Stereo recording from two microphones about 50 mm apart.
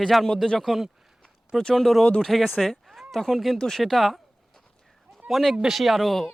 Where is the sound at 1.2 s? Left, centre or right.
Centre.